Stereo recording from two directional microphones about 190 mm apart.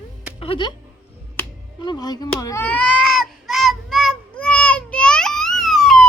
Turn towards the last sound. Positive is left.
turn(degrees=0)  # may be behind; listen again after turning